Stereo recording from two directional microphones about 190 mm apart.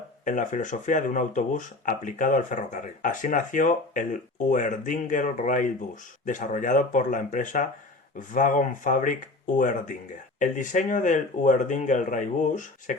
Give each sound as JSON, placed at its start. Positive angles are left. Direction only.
{"t": 0.3, "sound": "speech", "side_deg": 40}